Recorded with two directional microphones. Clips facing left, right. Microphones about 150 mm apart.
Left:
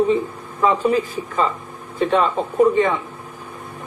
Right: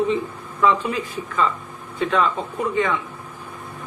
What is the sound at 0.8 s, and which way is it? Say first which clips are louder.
A man's voice: left 7 dB; 40° left (ahead or behind).